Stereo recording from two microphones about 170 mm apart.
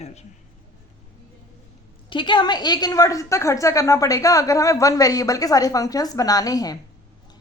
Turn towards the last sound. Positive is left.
turn(degrees=20)  # may be behind; listen again after turning